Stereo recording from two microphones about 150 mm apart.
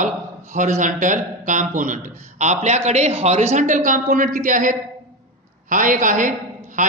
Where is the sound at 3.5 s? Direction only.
60° right (ahead or behind).